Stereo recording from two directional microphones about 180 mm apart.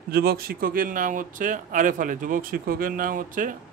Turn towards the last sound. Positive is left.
turn(degrees=-50)  # may be behind; listen again after turning